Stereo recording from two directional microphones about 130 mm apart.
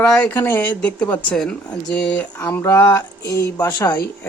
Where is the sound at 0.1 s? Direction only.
15° left (ahead or behind); by 4.0 s 30° left (ahead or behind).